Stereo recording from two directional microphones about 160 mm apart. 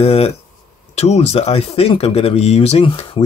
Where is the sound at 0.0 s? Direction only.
40° left (ahead or behind).